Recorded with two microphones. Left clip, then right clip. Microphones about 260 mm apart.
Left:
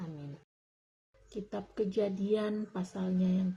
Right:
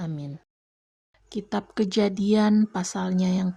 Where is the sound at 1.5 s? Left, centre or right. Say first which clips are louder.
Right 8 dB; right.